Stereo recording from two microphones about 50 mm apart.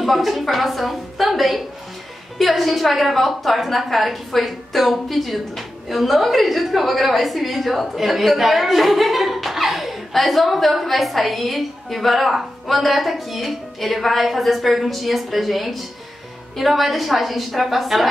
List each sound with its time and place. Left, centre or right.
0.0 s a woman's voice: centre